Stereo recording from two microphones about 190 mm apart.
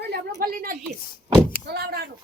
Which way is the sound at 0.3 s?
50° right (ahead or behind).